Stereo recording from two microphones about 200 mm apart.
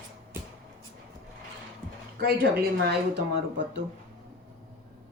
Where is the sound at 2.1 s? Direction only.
50° right (ahead or behind).